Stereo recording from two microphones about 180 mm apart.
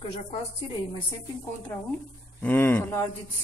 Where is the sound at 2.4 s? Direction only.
10° left (ahead or behind).